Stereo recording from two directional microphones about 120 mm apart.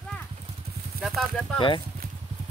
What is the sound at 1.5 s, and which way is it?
Speech, 45° left (ahead or behind).